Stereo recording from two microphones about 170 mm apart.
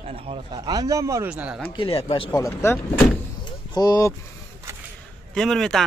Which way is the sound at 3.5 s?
25° left (ahead or behind).